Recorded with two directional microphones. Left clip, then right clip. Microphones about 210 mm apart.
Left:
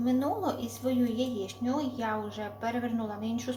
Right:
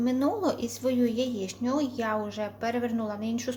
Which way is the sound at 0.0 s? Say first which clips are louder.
Right 3 dB; 55° right (ahead or behind).